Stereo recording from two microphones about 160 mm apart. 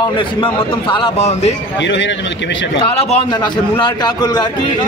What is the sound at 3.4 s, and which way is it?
A man's voice, 30° left (ahead or behind).